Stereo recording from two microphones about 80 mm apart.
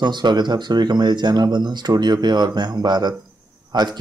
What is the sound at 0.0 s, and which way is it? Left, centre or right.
Speech, right.